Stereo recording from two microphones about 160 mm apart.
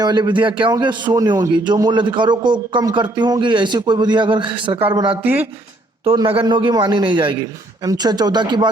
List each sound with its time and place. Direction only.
0.0 s a man's voice: 25° right (ahead or behind)
5.2 s speech: 10° right (ahead or behind)
6.1 s a man's voice: 30° right (ahead or behind)